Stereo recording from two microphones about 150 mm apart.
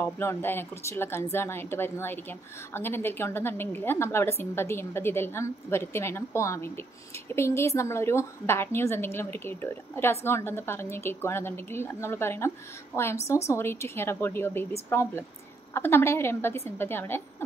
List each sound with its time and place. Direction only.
0.0 s a woman's voice: 15° left (ahead or behind)